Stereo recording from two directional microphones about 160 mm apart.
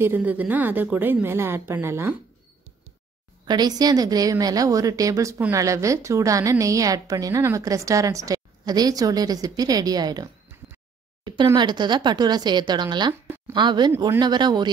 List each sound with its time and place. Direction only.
0.0 s a woman's voice: 10° right (ahead or behind)
3.4 s a woman's voice: 25° right (ahead or behind)
11.5 s a woman's voice: 30° right (ahead or behind)